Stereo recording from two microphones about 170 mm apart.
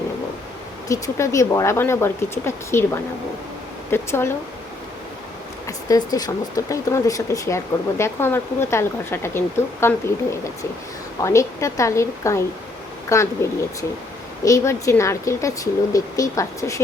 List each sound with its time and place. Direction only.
0.9 s speech: 20° left (ahead or behind)
5.6 s speech: 20° left (ahead or behind)
11.2 s speech: 15° left (ahead or behind)